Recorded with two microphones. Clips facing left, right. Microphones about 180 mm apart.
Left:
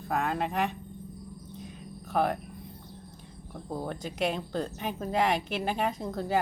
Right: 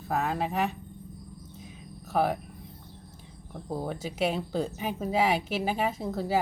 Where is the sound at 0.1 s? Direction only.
5° right (ahead or behind).